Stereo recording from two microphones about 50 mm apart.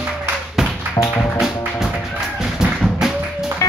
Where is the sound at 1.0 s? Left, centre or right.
Left.